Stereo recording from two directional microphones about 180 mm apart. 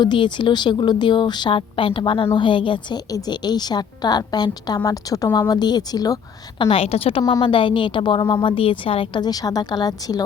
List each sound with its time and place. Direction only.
0.0 s a woman's voice: 25° left (ahead or behind)
6.6 s a woman's voice: 30° left (ahead or behind)